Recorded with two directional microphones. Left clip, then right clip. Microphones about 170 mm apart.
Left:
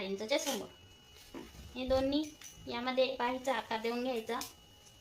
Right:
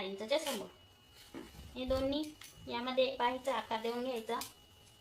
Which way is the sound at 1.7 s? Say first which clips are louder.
Left 3 dB; 30° left (ahead or behind).